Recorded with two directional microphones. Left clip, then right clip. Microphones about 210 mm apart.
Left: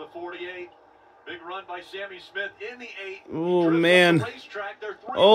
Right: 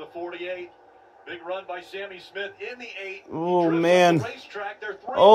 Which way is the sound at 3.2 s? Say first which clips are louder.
Even; 20° left (ahead or behind).